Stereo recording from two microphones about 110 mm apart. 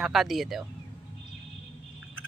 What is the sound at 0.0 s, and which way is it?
Speech, centre (ahead or behind).